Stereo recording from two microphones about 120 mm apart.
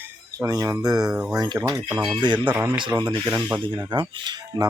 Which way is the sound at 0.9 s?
5° right (ahead or behind).